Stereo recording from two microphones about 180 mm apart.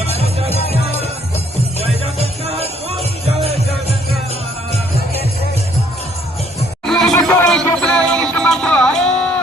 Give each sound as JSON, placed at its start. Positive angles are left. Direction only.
{"t": 0.0, "sound": "music", "side_deg": -35}
{"t": 6.8, "sound": "music", "side_deg": 5}